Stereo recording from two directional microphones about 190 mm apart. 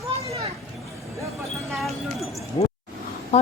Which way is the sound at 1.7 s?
Centre (ahead or behind).